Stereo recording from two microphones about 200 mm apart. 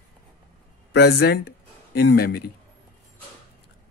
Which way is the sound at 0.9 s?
55° left (ahead or behind).